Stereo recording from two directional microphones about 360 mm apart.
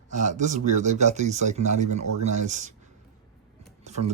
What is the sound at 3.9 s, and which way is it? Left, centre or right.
Speech, centre.